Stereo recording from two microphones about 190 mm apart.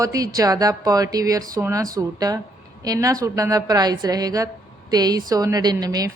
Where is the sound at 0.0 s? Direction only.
15° right (ahead or behind).